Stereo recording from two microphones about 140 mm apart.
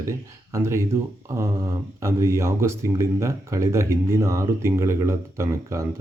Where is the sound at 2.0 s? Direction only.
20° right (ahead or behind).